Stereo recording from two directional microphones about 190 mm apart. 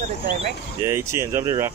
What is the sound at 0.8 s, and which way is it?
Speech, 10° right (ahead or behind).